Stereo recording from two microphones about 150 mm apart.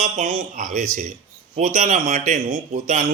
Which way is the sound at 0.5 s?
55° right (ahead or behind).